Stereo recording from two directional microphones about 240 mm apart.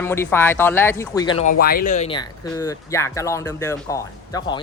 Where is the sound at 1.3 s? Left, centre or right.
Left.